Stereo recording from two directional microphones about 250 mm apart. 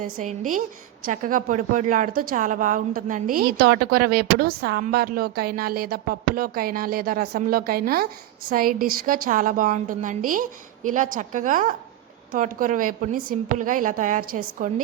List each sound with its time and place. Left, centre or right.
0.0 s a woman's voice: right